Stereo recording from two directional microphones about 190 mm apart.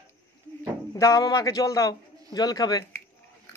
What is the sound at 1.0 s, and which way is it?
A man's voice, 20° left (ahead or behind).